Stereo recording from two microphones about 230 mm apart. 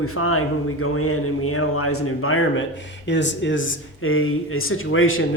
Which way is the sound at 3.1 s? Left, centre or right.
Left.